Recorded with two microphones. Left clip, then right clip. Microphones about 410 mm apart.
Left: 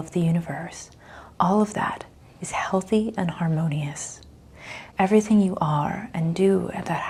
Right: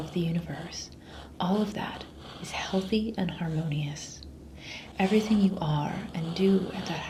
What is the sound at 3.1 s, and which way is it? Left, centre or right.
Speech, left.